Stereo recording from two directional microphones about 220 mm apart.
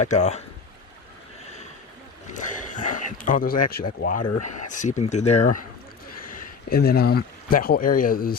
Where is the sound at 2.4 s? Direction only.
35° left (ahead or behind).